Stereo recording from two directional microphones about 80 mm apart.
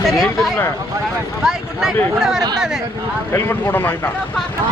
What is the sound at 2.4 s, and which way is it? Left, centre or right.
Speech, right.